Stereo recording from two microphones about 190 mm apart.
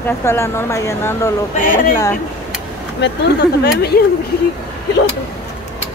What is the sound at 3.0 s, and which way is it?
Speech, 60° left (ahead or behind).